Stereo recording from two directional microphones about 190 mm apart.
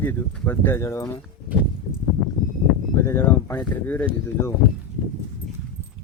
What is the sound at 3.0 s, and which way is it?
Speech, 15° left (ahead or behind).